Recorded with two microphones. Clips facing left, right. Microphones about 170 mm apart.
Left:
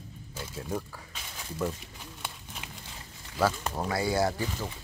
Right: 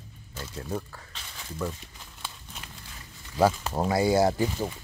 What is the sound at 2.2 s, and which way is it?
Horse, 15° left (ahead or behind).